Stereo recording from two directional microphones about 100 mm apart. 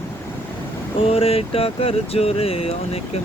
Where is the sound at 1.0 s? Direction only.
80° left.